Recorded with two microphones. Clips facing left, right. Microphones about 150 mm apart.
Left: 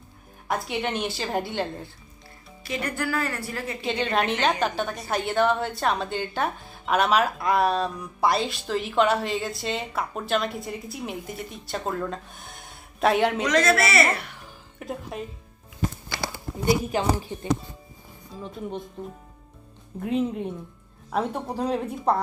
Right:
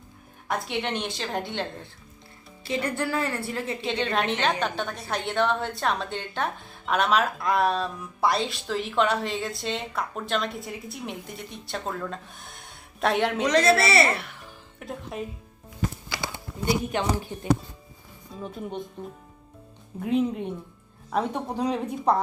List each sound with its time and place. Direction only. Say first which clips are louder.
0.4 s a woman's voice: left 1 dB; centre (ahead or behind)
2.6 s a woman's voice: right 1 dB; 25° right (ahead or behind)
3.8 s a woman's voice: left 3 dB; centre (ahead or behind)
13.4 s a woman's voice: right 1 dB; 35° right (ahead or behind)
14.2 s speech: even; centre (ahead or behind)
16.6 s a woman's voice: left 3 dB; 5° left (ahead or behind)
18.3 s speech: right 1 dB; centre (ahead or behind)
20.0 s a woman's voice: right 1 dB; centre (ahead or behind)